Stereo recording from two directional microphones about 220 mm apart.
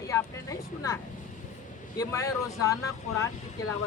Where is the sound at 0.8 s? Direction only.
15° left (ahead or behind).